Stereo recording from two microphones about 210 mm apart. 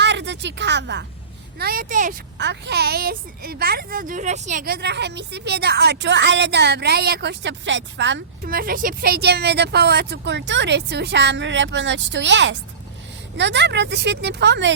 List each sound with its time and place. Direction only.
0.0 s a sound: 55° right (ahead or behind)
1.5 s a woman's voice: 45° right (ahead or behind)
2.4 s a woman's voice: 55° right (ahead or behind)